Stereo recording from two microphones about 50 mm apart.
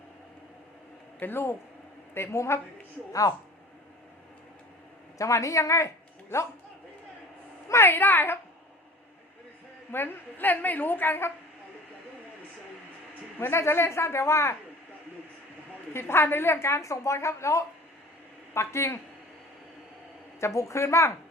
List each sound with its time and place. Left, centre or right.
1.2 s a woman's voice: left
2.1 s a woman's voice: left
5.1 s speech: left
7.9 s a woman's voice: left
9.9 s a woman's voice: left
13.4 s a woman's voice: left
15.9 s a woman's voice: left
18.5 s a woman's voice: left
20.4 s a woman's voice: left